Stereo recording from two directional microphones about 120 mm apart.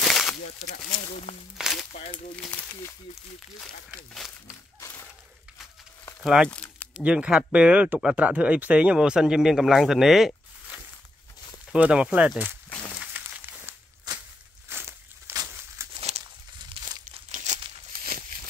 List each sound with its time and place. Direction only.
0.0 s a sound: centre (ahead or behind)
1.3 s speech: 60° left (ahead or behind)
1.6 s speech: centre (ahead or behind)
1.9 s speech: 90° left
2.5 s speech: 15° left (ahead or behind)
4.5 s crumpling: 25° left (ahead or behind)
6.2 s speech: 5° right (ahead or behind)
6.5 s crumpling: 10° left (ahead or behind)
7.0 s speech: 10° right (ahead or behind)
13.1 s a sound: 15° right (ahead or behind)
14.7 s walk: 20° right (ahead or behind)
15.8 s a sound: 25° right (ahead or behind)
17.0 s crumpling: 85° right